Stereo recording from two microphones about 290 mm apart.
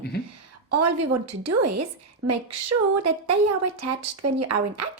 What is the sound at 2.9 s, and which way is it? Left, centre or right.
Speech, right.